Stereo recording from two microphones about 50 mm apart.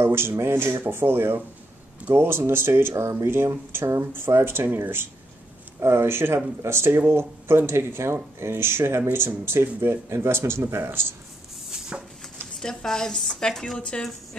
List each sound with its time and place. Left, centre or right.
0.0 s speech: right
3.0 s speech: right
3.7 s speech: right
4.3 s speech: right
5.8 s speech: right
11.9 s a sound: right
12.5 s a woman's voice: centre
13.7 s a woman's voice: left